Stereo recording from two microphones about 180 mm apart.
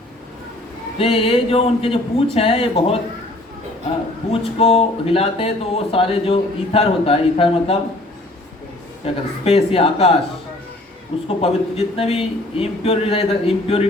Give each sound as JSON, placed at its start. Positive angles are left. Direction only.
{"t": 0.9, "sound": "speech", "side_deg": 30}
{"t": 4.3, "sound": "speech", "side_deg": 35}
{"t": 9.0, "sound": "speech", "side_deg": 35}
{"t": 11.3, "sound": "speech", "side_deg": 30}